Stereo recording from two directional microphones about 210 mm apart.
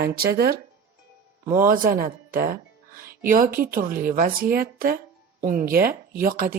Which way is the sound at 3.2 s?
40° right (ahead or behind).